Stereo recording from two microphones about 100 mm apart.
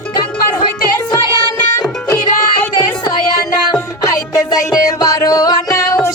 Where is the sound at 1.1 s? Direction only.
50° left (ahead or behind); by 6.1 s 35° left (ahead or behind).